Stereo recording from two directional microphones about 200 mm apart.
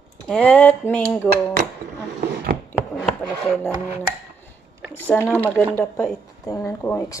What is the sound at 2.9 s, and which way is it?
Chopping, 5° left (ahead or behind).